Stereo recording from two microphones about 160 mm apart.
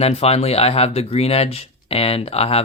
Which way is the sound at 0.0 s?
40° left (ahead or behind).